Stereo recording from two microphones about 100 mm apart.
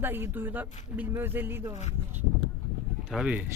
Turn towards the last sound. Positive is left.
turn(degrees=-10)  # may be behind; listen again after turning